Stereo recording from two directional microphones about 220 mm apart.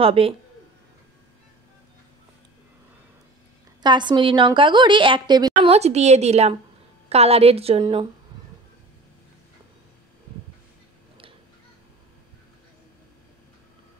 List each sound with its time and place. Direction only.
0.0 s a woman's voice: 25° right (ahead or behind)
3.8 s a woman's voice: 20° right (ahead or behind)